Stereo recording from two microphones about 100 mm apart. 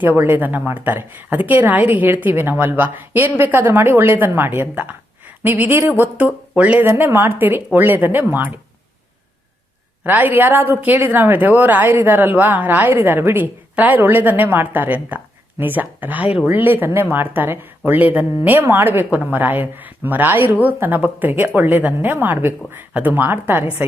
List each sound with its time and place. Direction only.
0.0 s a woman's voice: 20° right (ahead or behind)
10.0 s a woman's voice: 20° right (ahead or behind)